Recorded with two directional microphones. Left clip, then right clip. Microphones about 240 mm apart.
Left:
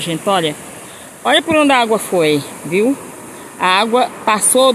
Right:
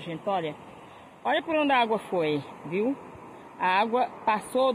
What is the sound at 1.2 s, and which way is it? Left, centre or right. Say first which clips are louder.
Speech: left 13 dB; centre.